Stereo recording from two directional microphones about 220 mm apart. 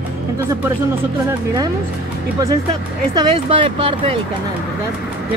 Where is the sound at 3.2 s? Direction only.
25° right (ahead or behind).